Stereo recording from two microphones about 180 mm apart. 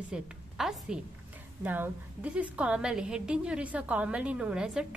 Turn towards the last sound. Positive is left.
turn(degrees=-5)  # may be behind; listen again after turning